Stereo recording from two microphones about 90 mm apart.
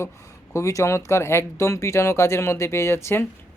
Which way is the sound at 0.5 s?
35° left (ahead or behind).